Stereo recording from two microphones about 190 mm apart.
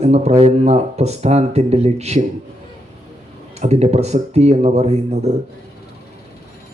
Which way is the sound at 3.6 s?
35° right (ahead or behind).